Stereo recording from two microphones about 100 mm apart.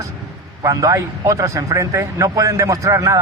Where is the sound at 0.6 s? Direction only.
35° right (ahead or behind).